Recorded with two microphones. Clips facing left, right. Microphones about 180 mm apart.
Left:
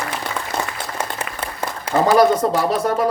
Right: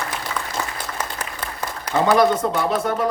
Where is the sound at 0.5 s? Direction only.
60° left (ahead or behind).